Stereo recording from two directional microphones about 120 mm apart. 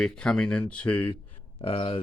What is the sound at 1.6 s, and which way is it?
Speech, 50° left (ahead or behind).